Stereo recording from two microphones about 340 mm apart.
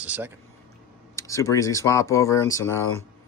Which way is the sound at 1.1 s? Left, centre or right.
Centre.